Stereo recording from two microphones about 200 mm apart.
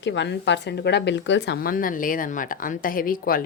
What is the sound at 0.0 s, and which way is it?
Speech, 60° left (ahead or behind).